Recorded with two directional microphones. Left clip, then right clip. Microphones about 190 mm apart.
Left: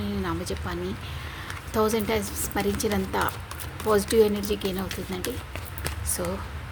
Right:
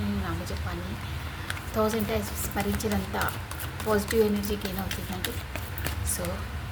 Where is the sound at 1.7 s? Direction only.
50° left (ahead or behind).